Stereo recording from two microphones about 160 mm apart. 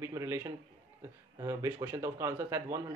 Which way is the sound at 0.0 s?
15° right (ahead or behind).